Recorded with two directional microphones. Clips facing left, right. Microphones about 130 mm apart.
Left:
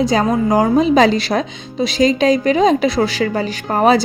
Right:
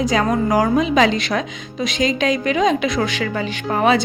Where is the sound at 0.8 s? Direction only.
35° left (ahead or behind).